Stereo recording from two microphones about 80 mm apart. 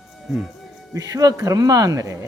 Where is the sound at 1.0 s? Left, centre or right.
Right.